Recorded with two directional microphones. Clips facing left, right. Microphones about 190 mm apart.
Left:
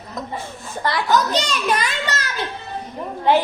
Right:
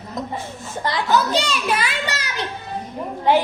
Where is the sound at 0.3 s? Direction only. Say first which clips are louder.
Right 1 dB; 15° right (ahead or behind).